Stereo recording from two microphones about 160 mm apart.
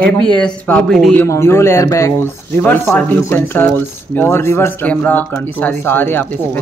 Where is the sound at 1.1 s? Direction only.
15° left (ahead or behind).